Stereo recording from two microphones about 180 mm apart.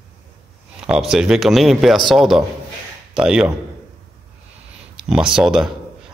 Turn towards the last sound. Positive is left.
turn(degrees=-5)  # may be behind; listen again after turning